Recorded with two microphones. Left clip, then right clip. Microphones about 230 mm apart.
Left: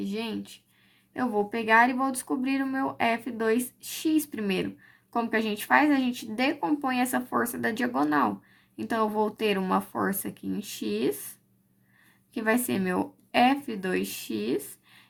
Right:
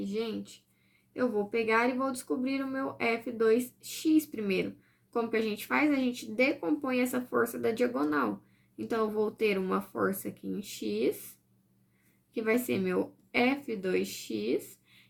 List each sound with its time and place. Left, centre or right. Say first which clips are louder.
0.0 s speech: left 1 dB; left
12.3 s speech: left 3 dB; left